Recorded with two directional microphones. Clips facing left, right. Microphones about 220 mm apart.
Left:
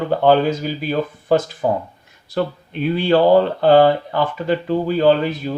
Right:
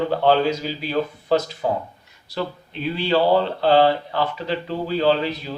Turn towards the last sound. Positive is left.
turn(degrees=50)  # may be behind; listen again after turning